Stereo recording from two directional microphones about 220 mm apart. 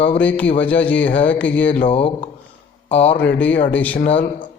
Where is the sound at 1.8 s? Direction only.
25° left (ahead or behind).